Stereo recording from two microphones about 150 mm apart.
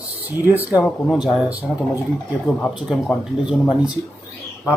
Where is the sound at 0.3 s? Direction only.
15° right (ahead or behind).